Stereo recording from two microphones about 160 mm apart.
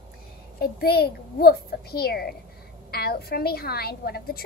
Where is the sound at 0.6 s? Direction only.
70° left (ahead or behind).